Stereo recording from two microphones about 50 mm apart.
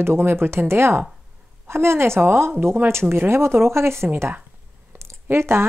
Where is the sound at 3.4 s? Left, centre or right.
Right.